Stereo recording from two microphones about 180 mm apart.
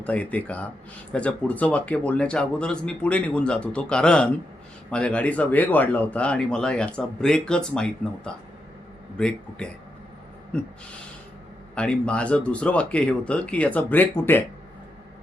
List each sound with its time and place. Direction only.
0.0 s speech: 10° left (ahead or behind)
11.7 s speech: 5° left (ahead or behind)